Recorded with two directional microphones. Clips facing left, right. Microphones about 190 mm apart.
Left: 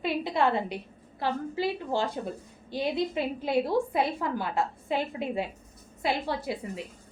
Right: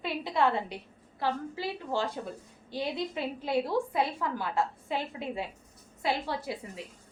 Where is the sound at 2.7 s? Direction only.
15° left (ahead or behind).